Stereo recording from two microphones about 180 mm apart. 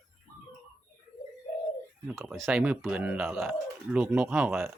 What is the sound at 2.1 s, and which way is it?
Speech, 5° right (ahead or behind).